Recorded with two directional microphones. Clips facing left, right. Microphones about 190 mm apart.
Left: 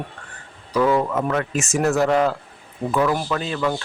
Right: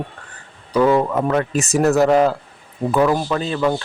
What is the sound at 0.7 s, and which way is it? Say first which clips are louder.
Speech: right 3 dB; 30° right (ahead or behind).